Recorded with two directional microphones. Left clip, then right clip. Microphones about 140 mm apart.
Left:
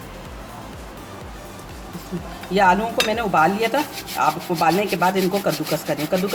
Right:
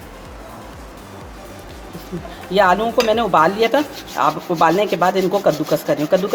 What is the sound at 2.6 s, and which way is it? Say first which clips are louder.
Speech: right 3 dB; 40° right (ahead or behind).